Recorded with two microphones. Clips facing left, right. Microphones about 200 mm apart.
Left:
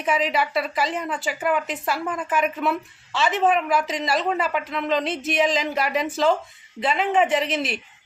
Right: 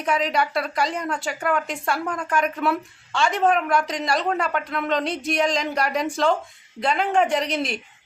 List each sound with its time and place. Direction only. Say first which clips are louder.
0.0 s a woman's voice: even; centre (ahead or behind)